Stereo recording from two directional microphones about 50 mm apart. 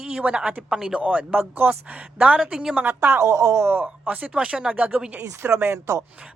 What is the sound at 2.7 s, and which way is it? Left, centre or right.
Speech, right.